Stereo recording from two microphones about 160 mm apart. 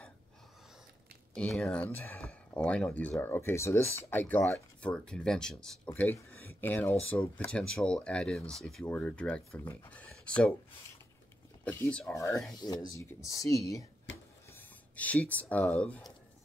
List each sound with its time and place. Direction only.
1.3 s speech: 5° left (ahead or behind)
11.6 s speech: 10° left (ahead or behind)
14.5 s speech: 10° left (ahead or behind)